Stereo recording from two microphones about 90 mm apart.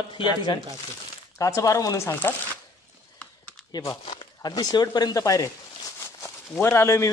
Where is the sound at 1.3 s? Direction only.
40° left (ahead or behind).